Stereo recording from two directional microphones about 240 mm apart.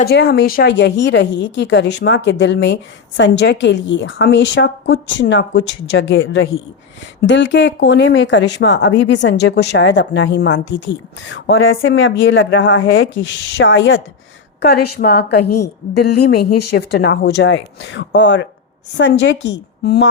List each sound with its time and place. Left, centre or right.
0.0 s a woman's voice: left